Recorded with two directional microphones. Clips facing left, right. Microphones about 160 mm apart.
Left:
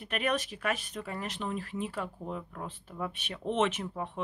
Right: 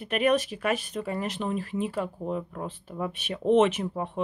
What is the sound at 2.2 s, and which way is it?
Speech, 20° right (ahead or behind).